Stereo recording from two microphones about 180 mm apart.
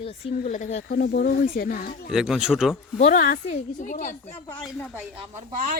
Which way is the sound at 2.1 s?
5° right (ahead or behind).